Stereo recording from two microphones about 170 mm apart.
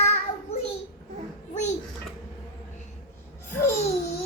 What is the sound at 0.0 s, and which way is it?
Child singing, 40° left (ahead or behind).